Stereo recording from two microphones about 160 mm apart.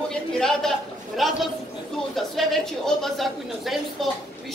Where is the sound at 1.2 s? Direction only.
Centre (ahead or behind).